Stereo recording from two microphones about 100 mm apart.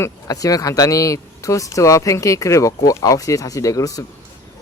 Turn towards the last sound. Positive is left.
turn(degrees=35)  # may be behind; listen again after turning